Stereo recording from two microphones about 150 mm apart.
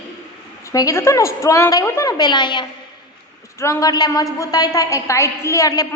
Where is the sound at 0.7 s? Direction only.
20° left (ahead or behind).